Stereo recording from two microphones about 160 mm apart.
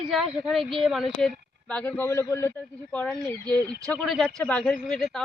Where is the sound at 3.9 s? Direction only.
Centre (ahead or behind).